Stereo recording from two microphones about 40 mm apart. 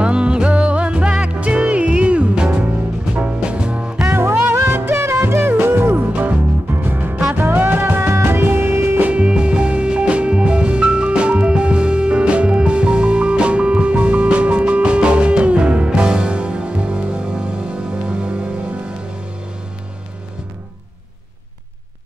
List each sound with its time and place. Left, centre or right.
0.0 s music: right
4.1 s music: right
4.7 s music: right
5.9 s music: right
6.7 s music: right
9.1 s music: right